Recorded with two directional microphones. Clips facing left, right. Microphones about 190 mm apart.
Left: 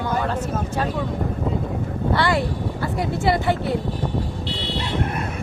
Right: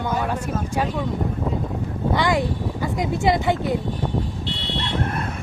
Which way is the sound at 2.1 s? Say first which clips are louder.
Right 1 dB; 15° right (ahead or behind).